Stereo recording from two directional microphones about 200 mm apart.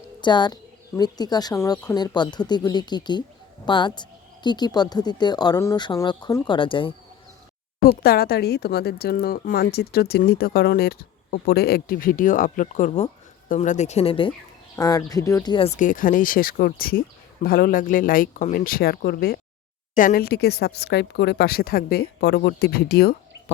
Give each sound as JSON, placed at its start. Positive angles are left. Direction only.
{"t": 0.2, "sound": "a woman's voice", "side_deg": 20}
{"t": 7.8, "sound": "speech", "side_deg": 50}